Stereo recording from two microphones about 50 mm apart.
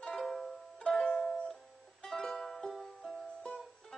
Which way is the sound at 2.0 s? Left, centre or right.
Centre.